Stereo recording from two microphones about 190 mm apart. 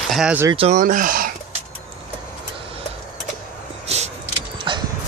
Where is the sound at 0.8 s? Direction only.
45° right (ahead or behind).